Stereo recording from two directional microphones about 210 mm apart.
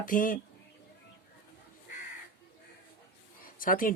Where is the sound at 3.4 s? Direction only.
40° left (ahead or behind).